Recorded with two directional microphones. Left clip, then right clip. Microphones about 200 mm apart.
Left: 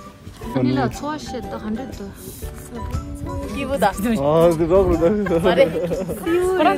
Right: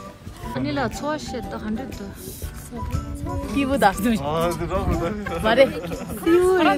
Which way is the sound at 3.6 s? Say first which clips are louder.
Right 1 dB; 45° right (ahead or behind).